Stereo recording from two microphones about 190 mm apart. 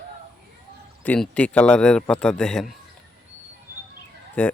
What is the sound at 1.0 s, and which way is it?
A man's voice, 5° left (ahead or behind).